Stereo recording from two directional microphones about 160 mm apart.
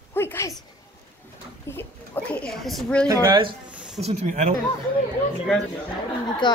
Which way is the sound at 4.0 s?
45° right (ahead or behind).